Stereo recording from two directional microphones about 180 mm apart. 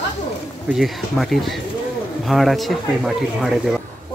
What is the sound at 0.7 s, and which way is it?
Speech, centre (ahead or behind).